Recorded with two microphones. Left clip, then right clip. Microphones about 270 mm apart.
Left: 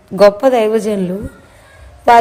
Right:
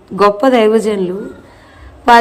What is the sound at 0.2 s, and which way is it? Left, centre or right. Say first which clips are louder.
A woman's voice: left 1 dB; left.